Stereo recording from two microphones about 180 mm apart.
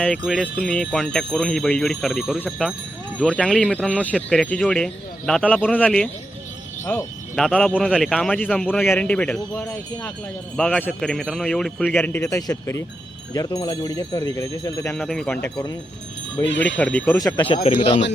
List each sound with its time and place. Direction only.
0.0 s a man's voice: 5° left (ahead or behind)
14.9 s a man's voice: centre (ahead or behind)
17.2 s speech: 20° left (ahead or behind)